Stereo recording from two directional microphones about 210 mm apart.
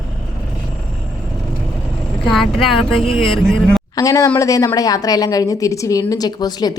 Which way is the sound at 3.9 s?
15° left (ahead or behind).